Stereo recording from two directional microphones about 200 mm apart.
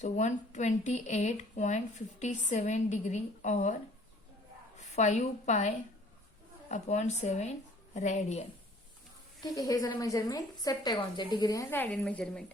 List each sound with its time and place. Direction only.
0.0 s speech: 35° left (ahead or behind)
4.8 s a woman's voice: 35° left (ahead or behind)
9.4 s a woman's voice: 20° left (ahead or behind)